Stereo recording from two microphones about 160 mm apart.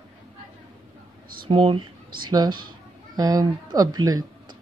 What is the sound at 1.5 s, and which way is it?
Speech, 35° right (ahead or behind).